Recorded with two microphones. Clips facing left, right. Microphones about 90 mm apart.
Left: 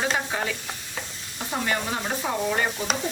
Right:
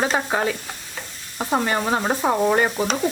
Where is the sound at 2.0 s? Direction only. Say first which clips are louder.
Right 7 dB; 50° right (ahead or behind).